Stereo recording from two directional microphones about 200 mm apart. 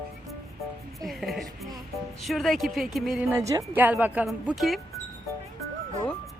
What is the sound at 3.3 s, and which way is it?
A woman's voice, 15° right (ahead or behind).